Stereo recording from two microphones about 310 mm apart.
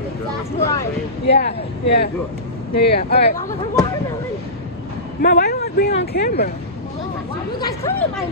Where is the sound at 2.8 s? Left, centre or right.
Left.